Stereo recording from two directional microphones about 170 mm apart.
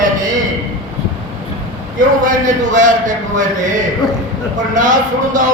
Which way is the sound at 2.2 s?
50° right (ahead or behind).